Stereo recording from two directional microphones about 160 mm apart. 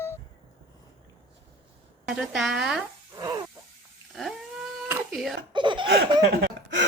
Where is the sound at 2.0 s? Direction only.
5° right (ahead or behind).